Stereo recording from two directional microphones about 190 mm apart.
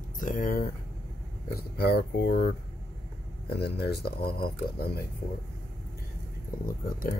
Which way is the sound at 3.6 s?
55° left (ahead or behind).